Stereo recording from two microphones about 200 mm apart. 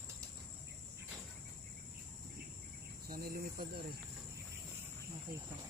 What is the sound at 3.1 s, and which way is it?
Speech, 50° right (ahead or behind).